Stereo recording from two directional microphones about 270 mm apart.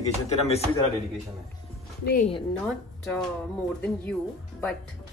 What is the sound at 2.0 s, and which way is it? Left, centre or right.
Speech, left.